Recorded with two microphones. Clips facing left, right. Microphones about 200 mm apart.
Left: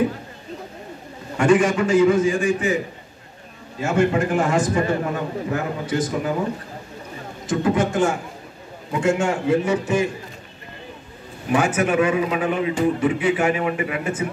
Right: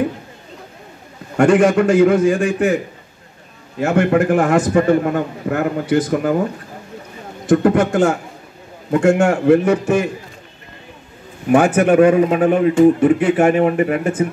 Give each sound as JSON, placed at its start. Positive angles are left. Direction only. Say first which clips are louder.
{"t": 1.3, "sound": "a man's voice", "louder": "right 5 dB", "side_deg": -60}
{"t": 3.8, "sound": "a man's voice", "louder": "right 5 dB", "side_deg": -65}
{"t": 7.4, "sound": "a man's voice", "louder": "right 7 dB", "side_deg": -60}
{"t": 11.5, "sound": "a man's voice", "louder": "right 7 dB", "side_deg": -55}